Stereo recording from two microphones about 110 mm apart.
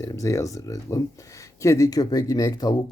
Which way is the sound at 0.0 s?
30° left (ahead or behind).